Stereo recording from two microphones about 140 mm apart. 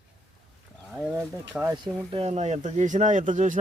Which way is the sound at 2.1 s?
50° right (ahead or behind).